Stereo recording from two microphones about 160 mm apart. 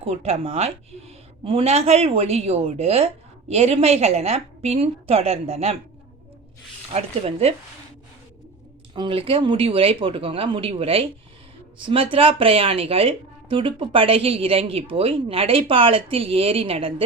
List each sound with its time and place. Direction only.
0.0 s speech: 40° right (ahead or behind)
6.9 s speech: 40° right (ahead or behind)
9.0 s speech: 35° right (ahead or behind)